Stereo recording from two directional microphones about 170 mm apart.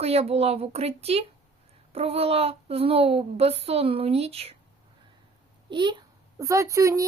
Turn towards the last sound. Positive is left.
turn(degrees=-20)  # may be behind; listen again after turning